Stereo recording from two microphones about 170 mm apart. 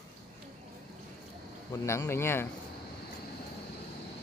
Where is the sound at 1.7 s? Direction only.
15° left (ahead or behind).